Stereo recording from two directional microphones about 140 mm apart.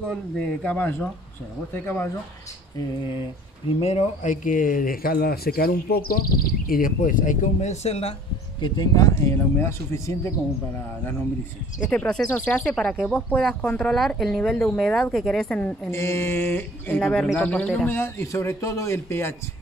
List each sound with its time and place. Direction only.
0.1 s speech: 10° left (ahead or behind)
3.8 s speech: 55° left (ahead or behind)
8.5 s speech: 30° left (ahead or behind)
11.9 s speech: 5° left (ahead or behind)
15.9 s speech: 20° left (ahead or behind)